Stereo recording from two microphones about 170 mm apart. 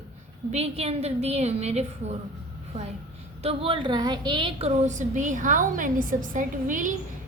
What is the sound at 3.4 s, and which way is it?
A woman's voice, 30° right (ahead or behind).